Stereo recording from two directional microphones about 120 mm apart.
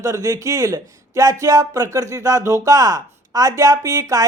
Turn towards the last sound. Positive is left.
turn(degrees=-30)  # may be behind; listen again after turning